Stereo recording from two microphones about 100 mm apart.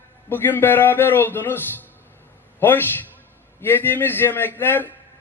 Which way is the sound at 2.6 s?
20° left (ahead or behind).